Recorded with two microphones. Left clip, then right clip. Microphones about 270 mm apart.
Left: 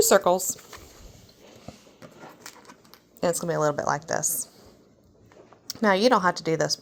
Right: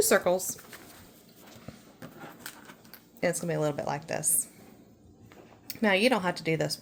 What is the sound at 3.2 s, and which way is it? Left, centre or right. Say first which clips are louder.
Speech: left 5 dB; centre.